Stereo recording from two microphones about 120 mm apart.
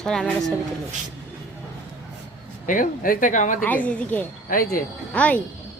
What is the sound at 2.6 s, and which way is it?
Speech, 90° left.